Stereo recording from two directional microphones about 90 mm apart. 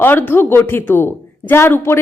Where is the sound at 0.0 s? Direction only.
20° left (ahead or behind).